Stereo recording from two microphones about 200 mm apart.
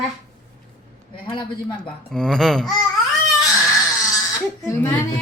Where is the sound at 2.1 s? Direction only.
Centre (ahead or behind).